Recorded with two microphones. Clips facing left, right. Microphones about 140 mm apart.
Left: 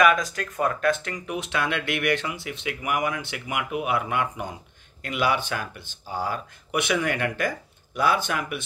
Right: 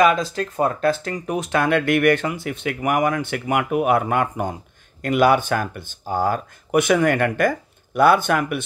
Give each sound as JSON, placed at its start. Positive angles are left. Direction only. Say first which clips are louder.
{"t": 0.0, "sound": "speech", "louder": "right 3 dB", "side_deg": -30}